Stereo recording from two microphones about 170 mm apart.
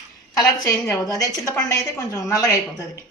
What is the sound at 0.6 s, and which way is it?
A woman's voice, 20° left (ahead or behind).